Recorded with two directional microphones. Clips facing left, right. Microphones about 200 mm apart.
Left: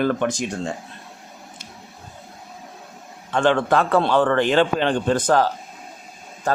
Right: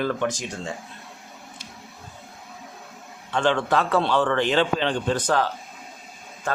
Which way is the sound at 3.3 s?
50° left (ahead or behind).